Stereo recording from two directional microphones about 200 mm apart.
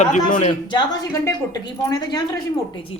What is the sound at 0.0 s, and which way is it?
Speech, 35° left (ahead or behind).